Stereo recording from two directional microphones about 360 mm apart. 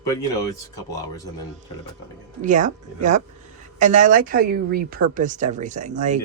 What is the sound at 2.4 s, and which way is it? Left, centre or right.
Speech, right.